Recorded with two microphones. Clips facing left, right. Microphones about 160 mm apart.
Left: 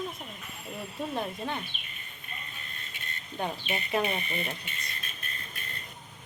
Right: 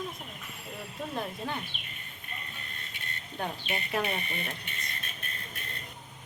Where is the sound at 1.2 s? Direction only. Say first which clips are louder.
Even; centre (ahead or behind).